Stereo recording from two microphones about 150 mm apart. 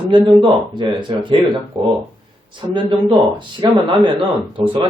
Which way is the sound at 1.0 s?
30° right (ahead or behind).